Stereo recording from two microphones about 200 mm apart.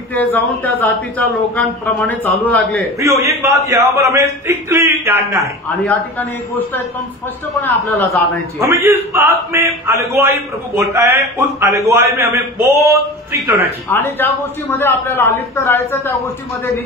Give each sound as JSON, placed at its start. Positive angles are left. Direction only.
{"t": 0.1, "sound": "a man's voice", "side_deg": 10}
{"t": 3.0, "sound": "a man's voice", "side_deg": -15}
{"t": 5.9, "sound": "a man's voice", "side_deg": 10}
{"t": 8.5, "sound": "a man's voice", "side_deg": -15}
{"t": 13.8, "sound": "a man's voice", "side_deg": 10}